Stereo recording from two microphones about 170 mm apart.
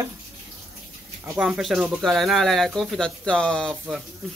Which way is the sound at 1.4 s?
Centre (ahead or behind).